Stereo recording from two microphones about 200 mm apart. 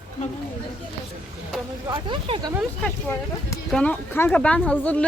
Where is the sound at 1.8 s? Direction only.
25° right (ahead or behind).